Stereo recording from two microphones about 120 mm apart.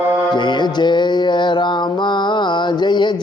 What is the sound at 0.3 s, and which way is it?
Mantra, 40° left (ahead or behind).